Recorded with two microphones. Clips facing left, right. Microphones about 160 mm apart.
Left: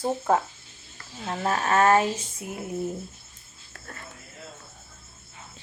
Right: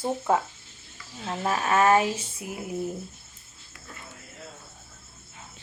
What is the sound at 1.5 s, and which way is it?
Speech, 40° left (ahead or behind).